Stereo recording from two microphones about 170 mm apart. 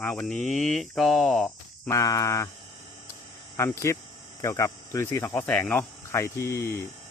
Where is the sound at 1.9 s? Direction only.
20° left (ahead or behind).